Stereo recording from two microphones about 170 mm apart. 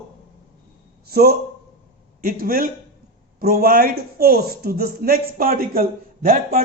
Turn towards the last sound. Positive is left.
turn(degrees=-60)  # may be behind; listen again after turning